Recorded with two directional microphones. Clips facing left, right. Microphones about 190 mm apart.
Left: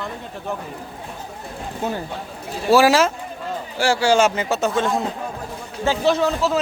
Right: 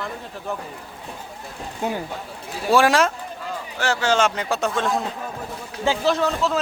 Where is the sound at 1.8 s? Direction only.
15° right (ahead or behind).